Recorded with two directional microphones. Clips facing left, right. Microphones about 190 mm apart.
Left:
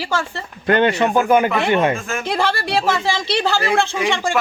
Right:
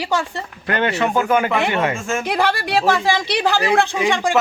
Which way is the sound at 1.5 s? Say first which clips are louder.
Even; 15° right (ahead or behind).